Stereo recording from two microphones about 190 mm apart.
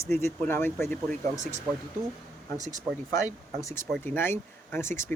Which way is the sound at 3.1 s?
15° left (ahead or behind).